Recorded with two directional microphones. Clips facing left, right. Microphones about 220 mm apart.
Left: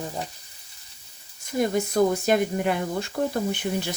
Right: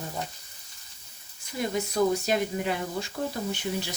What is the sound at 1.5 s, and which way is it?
Speech, 50° left (ahead or behind).